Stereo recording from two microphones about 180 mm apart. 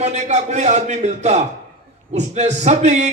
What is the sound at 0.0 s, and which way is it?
A man's voice, 40° right (ahead or behind).